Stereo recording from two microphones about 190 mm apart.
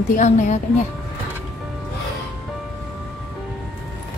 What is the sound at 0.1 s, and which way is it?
Speech, 40° left (ahead or behind).